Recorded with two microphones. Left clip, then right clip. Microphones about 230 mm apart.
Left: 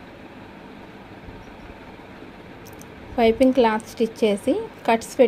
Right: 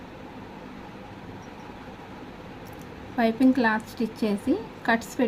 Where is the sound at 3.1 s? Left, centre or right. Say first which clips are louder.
Left 6 dB; centre.